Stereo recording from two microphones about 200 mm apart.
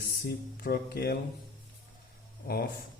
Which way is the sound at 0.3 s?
50° left (ahead or behind).